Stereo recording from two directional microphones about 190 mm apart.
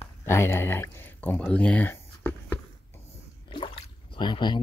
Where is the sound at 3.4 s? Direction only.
25° left (ahead or behind).